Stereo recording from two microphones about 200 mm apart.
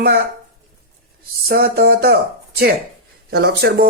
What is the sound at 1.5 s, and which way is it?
Speech, 45° right (ahead or behind).